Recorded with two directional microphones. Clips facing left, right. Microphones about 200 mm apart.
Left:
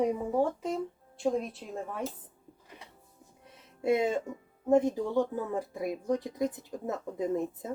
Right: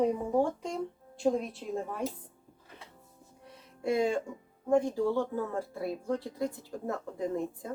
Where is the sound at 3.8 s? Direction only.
20° left (ahead or behind).